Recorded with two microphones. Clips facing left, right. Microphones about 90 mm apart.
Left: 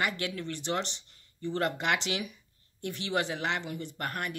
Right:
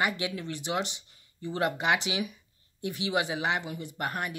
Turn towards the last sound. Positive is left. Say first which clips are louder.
# right 2 dB
turn(degrees=-10)  # may be behind; listen again after turning